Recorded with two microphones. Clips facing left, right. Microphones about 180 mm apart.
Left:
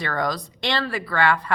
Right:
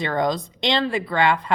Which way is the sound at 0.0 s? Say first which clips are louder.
Right 4 dB; 20° right (ahead or behind).